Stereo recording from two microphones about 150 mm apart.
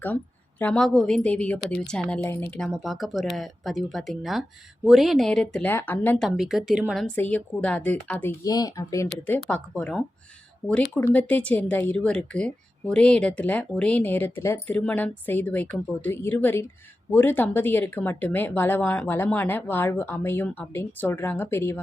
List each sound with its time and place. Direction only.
0.6 s speech: 5° left (ahead or behind)
2.2 s speech: 15° left (ahead or behind)
2.6 s speech: centre (ahead or behind)
6.2 s speech: 5° right (ahead or behind)
7.0 s speech: 10° left (ahead or behind)
8.4 s speech: 25° left (ahead or behind)
9.2 s speech: 10° left (ahead or behind)